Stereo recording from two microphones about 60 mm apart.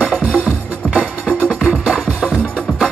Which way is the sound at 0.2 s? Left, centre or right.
Right.